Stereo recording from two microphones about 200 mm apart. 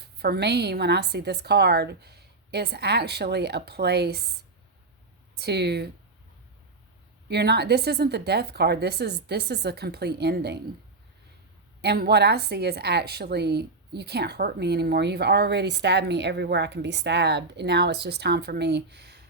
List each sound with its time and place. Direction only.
0.0 s a woman's voice: 55° right (ahead or behind)
5.4 s a woman's voice: 55° right (ahead or behind)
7.3 s a woman's voice: 55° right (ahead or behind)
11.8 s a woman's voice: 55° right (ahead or behind)